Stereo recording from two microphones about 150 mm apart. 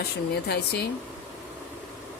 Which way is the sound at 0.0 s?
90° left.